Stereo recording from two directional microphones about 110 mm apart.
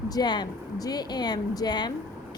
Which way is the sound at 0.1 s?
40° left (ahead or behind).